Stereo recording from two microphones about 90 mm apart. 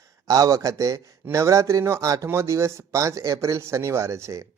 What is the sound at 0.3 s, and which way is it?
Speech, 40° right (ahead or behind).